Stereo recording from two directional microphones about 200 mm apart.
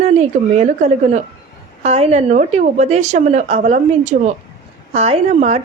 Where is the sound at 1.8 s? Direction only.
30° right (ahead or behind).